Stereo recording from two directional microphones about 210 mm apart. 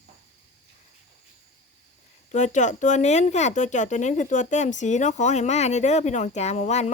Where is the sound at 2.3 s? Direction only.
35° left (ahead or behind).